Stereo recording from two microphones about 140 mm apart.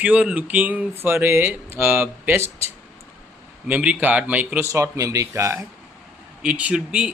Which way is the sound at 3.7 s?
10° right (ahead or behind).